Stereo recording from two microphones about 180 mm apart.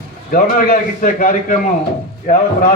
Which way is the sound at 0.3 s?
50° left (ahead or behind).